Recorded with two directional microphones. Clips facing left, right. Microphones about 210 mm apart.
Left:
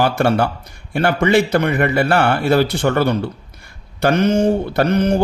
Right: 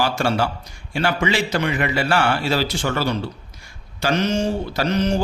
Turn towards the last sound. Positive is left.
turn(degrees=55)  # may be behind; listen again after turning